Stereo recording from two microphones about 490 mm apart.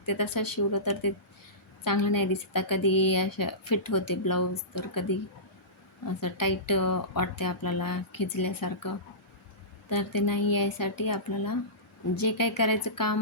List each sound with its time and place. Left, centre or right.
0.0 s speech: left
6.1 s speech: left